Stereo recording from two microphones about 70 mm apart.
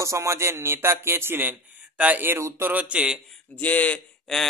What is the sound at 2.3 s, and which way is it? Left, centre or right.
Speech, right.